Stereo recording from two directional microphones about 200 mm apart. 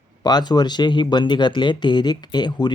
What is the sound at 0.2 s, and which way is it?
Speech, 20° left (ahead or behind).